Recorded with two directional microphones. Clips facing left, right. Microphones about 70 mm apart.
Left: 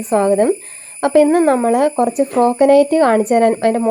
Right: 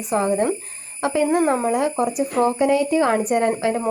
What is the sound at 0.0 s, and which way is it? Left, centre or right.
Speech, left.